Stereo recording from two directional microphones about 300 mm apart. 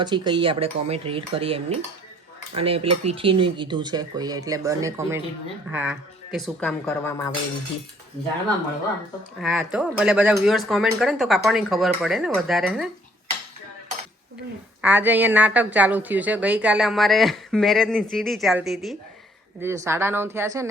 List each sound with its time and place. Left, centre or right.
0.0 s dishes: centre
2.9 s a woman's voice: centre
9.4 s a woman's voice: centre
14.8 s a woman's voice: centre